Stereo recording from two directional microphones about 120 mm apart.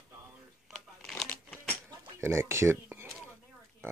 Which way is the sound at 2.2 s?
20° right (ahead or behind).